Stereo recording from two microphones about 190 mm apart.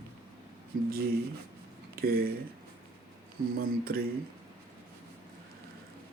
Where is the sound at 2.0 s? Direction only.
50° right (ahead or behind).